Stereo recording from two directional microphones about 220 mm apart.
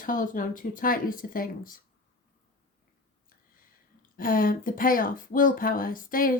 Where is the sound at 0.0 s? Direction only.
40° left (ahead or behind).